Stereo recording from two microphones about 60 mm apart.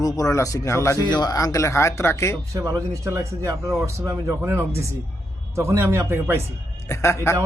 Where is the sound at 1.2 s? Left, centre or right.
Left.